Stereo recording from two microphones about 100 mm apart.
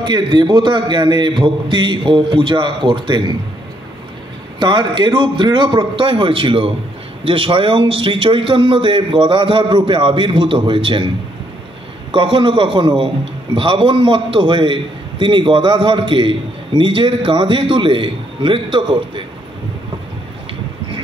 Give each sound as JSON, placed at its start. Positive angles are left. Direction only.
{"t": 0.0, "sound": "a man's voice", "side_deg": -50}
{"t": 4.6, "sound": "a man's voice", "side_deg": -50}
{"t": 12.1, "sound": "a man's voice", "side_deg": -55}